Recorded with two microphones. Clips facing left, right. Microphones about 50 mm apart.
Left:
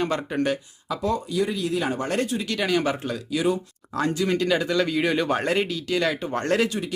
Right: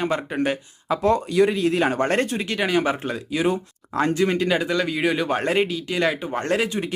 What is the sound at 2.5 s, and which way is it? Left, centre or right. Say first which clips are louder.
Speech: right 1 dB; right.